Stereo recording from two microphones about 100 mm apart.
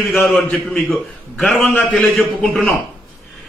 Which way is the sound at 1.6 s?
15° left (ahead or behind).